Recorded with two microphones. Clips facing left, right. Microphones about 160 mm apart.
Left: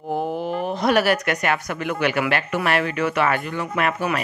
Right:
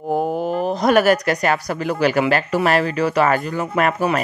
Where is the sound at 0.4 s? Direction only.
40° right (ahead or behind).